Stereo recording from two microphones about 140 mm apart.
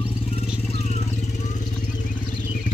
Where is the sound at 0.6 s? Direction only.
50° left (ahead or behind).